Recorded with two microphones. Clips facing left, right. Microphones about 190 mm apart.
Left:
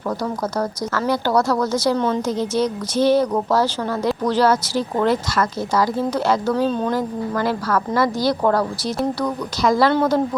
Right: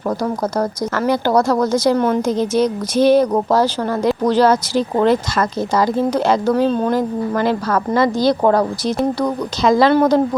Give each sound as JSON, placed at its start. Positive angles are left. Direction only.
{"t": 0.9, "sound": "a woman's voice", "side_deg": -20}
{"t": 9.6, "sound": "a woman's voice", "side_deg": -20}